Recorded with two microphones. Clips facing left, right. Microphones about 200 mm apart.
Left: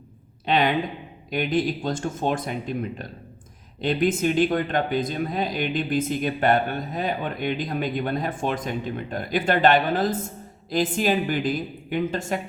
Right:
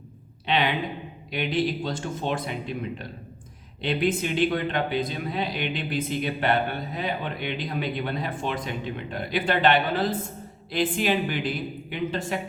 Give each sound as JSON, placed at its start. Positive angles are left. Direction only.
{"t": 0.4, "sound": "speech", "side_deg": 45}
{"t": 3.8, "sound": "speech", "side_deg": 45}